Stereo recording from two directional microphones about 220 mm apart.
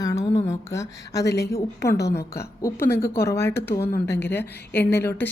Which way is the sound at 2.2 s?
45° left (ahead or behind).